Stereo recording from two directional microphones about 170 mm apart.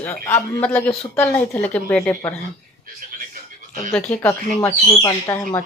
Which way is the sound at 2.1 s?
15° left (ahead or behind).